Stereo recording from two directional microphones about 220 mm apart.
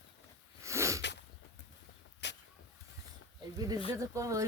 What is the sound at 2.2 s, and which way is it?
Vehicle, 55° left (ahead or behind).